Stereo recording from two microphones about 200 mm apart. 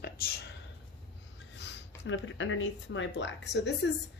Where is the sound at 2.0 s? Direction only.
70° left (ahead or behind).